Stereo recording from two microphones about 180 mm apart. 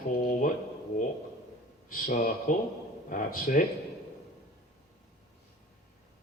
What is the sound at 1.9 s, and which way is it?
A man's voice, 50° left (ahead or behind).